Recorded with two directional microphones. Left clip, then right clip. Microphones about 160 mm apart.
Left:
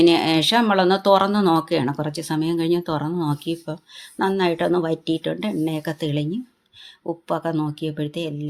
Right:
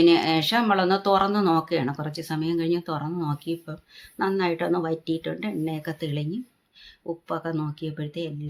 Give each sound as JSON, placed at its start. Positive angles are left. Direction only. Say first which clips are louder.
{"t": 0.0, "sound": "speech", "louder": "left 3 dB", "side_deg": 25}